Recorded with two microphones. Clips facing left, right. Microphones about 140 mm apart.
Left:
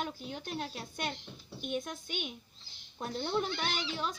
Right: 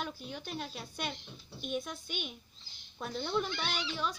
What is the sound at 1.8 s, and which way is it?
Speech, 55° left (ahead or behind).